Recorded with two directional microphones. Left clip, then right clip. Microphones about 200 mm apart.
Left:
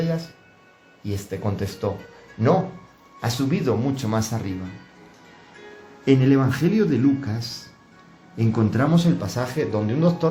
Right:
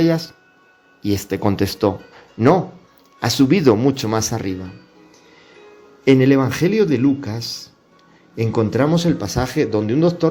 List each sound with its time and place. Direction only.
1.0 s speech: 50° right (ahead or behind)
3.2 s speech: 45° right (ahead or behind)
6.1 s speech: 40° right (ahead or behind)